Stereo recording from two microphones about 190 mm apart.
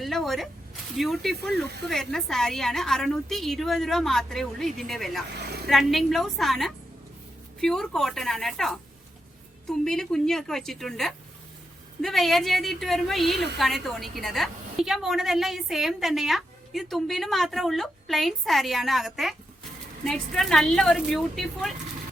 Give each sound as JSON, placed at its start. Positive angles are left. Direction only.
{"t": 0.0, "sound": "a sound", "side_deg": 0}
{"t": 0.9, "sound": "a woman's voice", "side_deg": 0}
{"t": 1.4, "sound": "speech", "side_deg": -60}
{"t": 1.9, "sound": "a woman's voice", "side_deg": 0}